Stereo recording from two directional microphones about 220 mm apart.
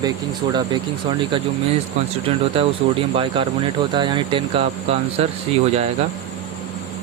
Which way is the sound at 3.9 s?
20° right (ahead or behind).